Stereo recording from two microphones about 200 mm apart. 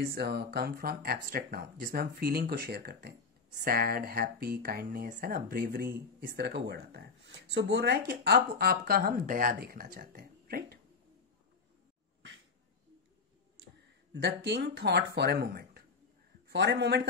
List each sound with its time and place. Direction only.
0.0 s speech: 50° right (ahead or behind)
14.1 s speech: 60° right (ahead or behind)